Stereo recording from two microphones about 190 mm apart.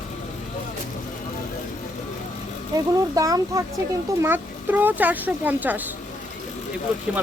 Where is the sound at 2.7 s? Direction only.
20° right (ahead or behind).